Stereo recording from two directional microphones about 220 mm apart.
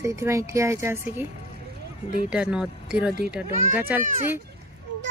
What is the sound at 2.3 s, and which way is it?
Speech, 5° right (ahead or behind).